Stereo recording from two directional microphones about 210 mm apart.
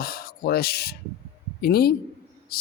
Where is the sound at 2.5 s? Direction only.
45° left (ahead or behind).